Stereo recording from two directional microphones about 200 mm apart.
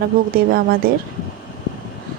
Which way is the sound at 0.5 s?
50° right (ahead or behind).